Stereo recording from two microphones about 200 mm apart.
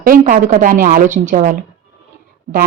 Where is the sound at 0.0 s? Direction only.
45° right (ahead or behind).